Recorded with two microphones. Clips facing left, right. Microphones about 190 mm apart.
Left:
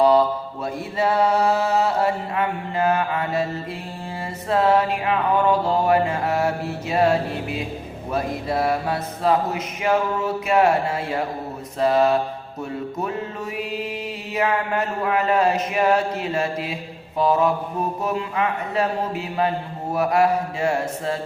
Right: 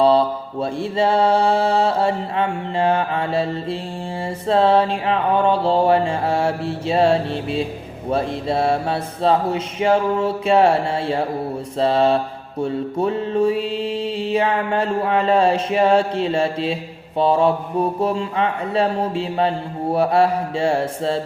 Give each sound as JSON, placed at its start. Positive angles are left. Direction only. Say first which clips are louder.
{"t": 0.6, "sound": "speech", "louder": "right 5 dB", "side_deg": -30}
{"t": 11.8, "sound": "mantra", "louder": "right 1 dB", "side_deg": -30}
{"t": 17.2, "sound": "speech", "louder": "right 3 dB", "side_deg": -30}